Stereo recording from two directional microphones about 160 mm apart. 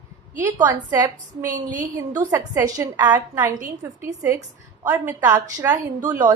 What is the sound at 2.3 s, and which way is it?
A woman's voice, 15° right (ahead or behind).